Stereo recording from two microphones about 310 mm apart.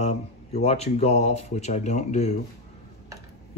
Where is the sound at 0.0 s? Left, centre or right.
Left.